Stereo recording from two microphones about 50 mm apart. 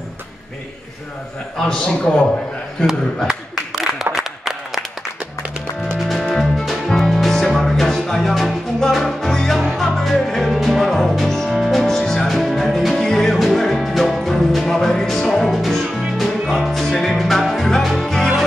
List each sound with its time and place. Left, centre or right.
1.6 s a man's voice: centre
3.3 s a sound: centre
6.5 s music: centre
9.6 s music: centre
9.8 s music: centre